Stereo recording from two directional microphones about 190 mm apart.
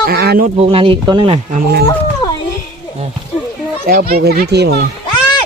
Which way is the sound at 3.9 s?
50° right (ahead or behind).